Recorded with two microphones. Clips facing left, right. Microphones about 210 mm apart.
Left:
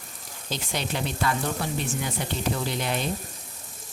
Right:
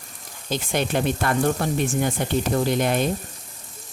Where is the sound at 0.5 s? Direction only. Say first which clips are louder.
Right 7 dB; 55° right (ahead or behind).